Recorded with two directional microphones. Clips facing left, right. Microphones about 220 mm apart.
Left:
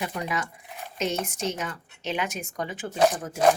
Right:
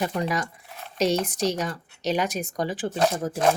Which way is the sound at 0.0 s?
40° right (ahead or behind).